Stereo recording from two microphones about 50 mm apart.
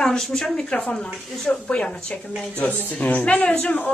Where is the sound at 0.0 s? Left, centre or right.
Centre; by 3.5 s left.